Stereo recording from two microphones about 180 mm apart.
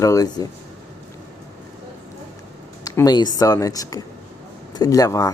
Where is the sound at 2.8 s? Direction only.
20° left (ahead or behind).